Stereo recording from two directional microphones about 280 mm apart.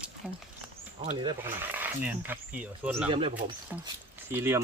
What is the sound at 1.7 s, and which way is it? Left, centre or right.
Speech, centre.